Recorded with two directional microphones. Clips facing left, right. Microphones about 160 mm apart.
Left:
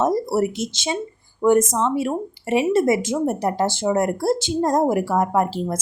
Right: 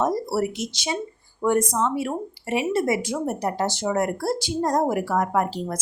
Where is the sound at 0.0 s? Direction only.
25° left (ahead or behind).